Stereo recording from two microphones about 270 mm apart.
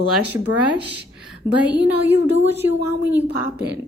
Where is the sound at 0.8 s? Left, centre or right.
Centre.